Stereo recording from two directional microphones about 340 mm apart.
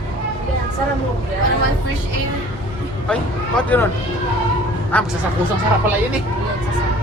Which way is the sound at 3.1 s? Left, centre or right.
Centre.